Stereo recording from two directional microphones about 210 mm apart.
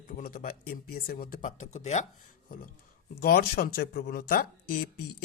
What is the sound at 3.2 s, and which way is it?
A woman's voice, 45° left (ahead or behind).